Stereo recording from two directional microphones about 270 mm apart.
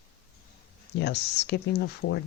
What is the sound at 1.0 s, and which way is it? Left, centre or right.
Speech, left.